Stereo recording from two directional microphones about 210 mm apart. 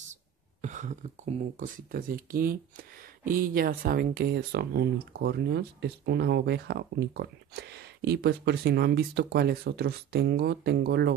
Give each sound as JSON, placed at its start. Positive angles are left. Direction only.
{"t": 0.1, "sound": "speech", "side_deg": -35}